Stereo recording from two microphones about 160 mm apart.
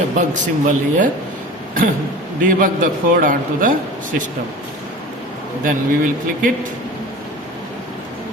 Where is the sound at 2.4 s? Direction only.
60° right (ahead or behind).